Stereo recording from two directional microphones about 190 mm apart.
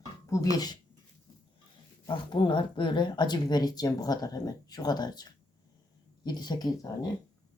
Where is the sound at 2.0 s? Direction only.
25° left (ahead or behind).